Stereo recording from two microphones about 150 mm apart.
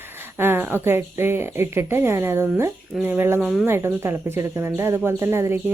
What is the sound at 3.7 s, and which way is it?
A woman's voice, 15° right (ahead or behind).